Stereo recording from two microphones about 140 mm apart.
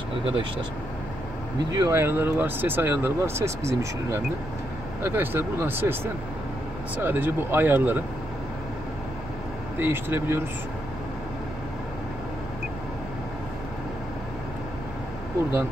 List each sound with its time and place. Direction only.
0.2 s speech: 35° right (ahead or behind)
1.7 s speech: 25° right (ahead or behind)
7.0 s speech: 15° right (ahead or behind)
9.8 s speech: 15° right (ahead or behind)